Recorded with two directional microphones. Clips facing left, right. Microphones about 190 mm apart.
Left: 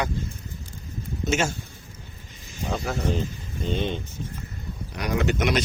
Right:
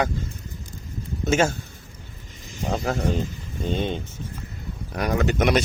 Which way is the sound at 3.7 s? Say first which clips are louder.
Right 1 dB; 45° right (ahead or behind).